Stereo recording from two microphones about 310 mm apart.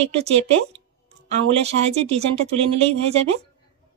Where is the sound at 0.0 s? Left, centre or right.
Centre.